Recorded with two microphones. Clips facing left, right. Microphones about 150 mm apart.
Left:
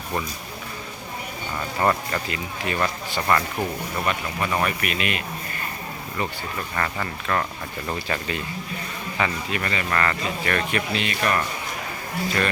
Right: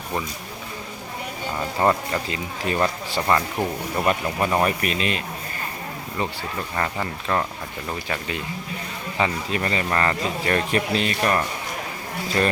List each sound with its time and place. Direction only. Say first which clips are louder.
1.5 s speech: right 2 dB; 15° right (ahead or behind)
3.2 s speech: right 1 dB; 15° right (ahead or behind)
4.0 s speech: right 5 dB; 35° right (ahead or behind)
6.7 s speech: right 1 dB; 15° right (ahead or behind)